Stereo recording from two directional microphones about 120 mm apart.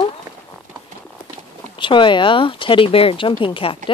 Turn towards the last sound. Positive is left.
turn(degrees=45)  # may be behind; listen again after turning